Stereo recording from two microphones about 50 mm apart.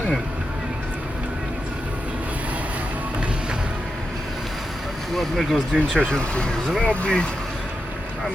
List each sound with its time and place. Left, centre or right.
5.1 s speech: centre
6.1 s speech: centre